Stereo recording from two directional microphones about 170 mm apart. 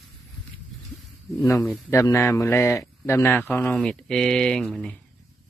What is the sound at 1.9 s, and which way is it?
A man's voice, 15° left (ahead or behind).